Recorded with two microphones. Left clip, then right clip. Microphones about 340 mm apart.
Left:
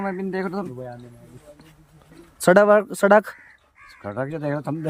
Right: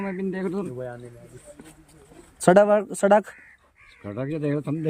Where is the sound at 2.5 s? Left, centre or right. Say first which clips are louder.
Left 2 dB; centre.